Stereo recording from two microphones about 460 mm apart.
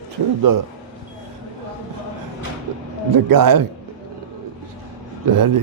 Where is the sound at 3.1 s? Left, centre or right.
Right.